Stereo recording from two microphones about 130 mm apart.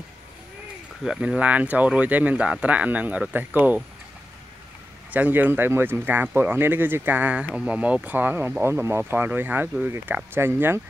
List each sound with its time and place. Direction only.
1.0 s speech: 5° right (ahead or behind)
5.1 s speech: 10° right (ahead or behind)